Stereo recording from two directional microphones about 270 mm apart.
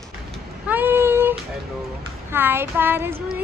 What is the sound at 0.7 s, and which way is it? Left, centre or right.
Child singing, centre.